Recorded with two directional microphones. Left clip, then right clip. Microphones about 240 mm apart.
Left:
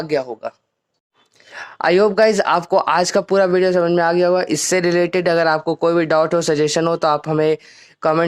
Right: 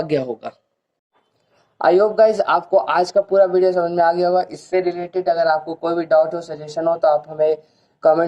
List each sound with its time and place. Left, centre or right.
0.0 s speech: centre
1.8 s speech: left